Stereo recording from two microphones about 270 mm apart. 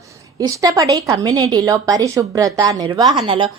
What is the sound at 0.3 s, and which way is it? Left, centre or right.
A woman's voice, centre.